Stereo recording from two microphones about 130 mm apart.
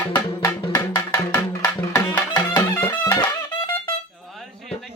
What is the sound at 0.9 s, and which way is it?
Music, 25° left (ahead or behind).